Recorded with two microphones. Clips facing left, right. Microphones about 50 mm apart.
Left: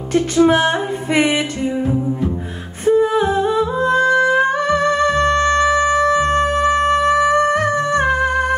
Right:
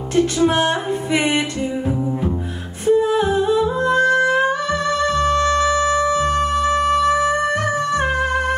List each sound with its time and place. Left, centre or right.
0.1 s music: left
2.9 s humming: left
4.6 s music: left